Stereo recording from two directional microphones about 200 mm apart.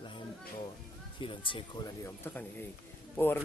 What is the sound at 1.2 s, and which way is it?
Speech, 25° left (ahead or behind).